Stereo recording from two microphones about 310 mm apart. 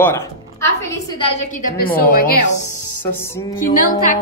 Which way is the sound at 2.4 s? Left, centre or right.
Left.